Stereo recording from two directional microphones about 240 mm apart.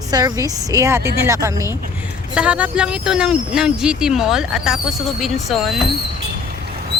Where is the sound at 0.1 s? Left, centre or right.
Centre.